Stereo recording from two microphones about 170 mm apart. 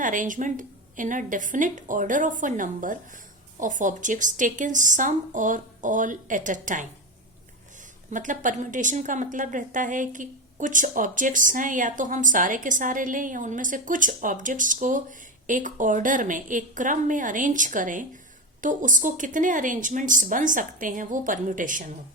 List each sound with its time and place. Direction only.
0.0 s a woman's voice: 50° right (ahead or behind)
8.1 s a woman's voice: 50° right (ahead or behind)